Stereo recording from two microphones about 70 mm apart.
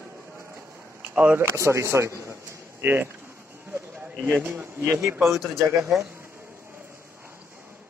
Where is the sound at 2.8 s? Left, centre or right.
Right.